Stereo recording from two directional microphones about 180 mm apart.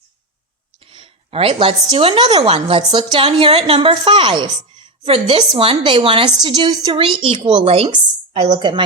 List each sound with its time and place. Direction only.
0.9 s a woman's voice: 30° right (ahead or behind)